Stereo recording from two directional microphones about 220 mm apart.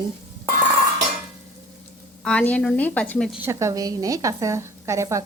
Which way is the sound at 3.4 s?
15° right (ahead or behind).